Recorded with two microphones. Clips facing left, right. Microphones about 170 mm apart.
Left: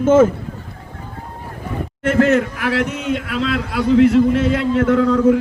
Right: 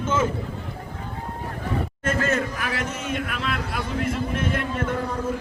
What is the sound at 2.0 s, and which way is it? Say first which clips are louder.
A man's voice: left 10 dB; 70° left (ahead or behind).